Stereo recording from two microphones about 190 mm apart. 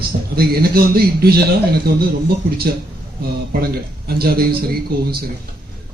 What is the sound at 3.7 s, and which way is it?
Speech, 55° right (ahead or behind).